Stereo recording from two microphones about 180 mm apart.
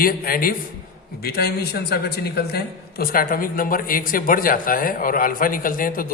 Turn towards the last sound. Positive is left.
turn(degrees=50)  # may be behind; listen again after turning